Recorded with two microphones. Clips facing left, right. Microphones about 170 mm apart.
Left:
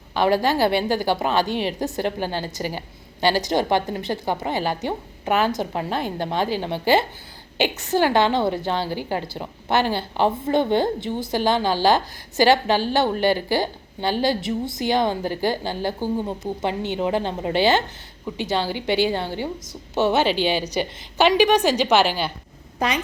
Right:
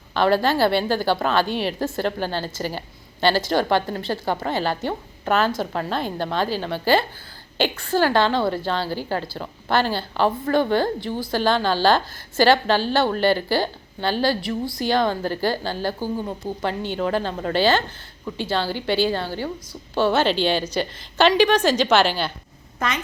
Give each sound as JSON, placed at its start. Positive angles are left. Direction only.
{"t": 0.1, "sound": "a woman's voice", "side_deg": 15}